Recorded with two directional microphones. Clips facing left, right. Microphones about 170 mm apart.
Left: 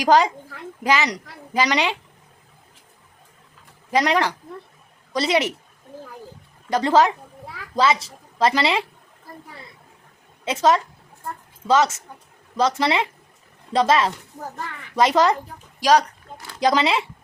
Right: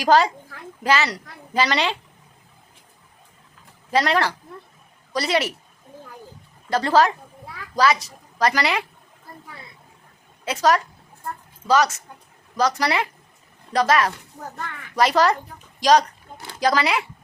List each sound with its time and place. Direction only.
0.0 s a woman's voice: 15° left (ahead or behind)
3.9 s a woman's voice: 15° left (ahead or behind)
6.7 s a child's voice: 15° left (ahead or behind)
10.4 s a child's voice: 25° left (ahead or behind)
15.8 s speech: 10° left (ahead or behind)
16.6 s a child's voice: 20° left (ahead or behind)